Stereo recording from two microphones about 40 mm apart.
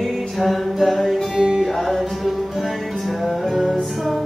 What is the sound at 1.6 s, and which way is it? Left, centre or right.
Music, centre.